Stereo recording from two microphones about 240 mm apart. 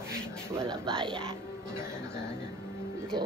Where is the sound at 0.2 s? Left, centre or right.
Centre.